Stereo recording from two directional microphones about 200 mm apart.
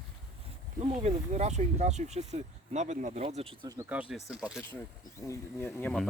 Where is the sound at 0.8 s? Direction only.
30° right (ahead or behind).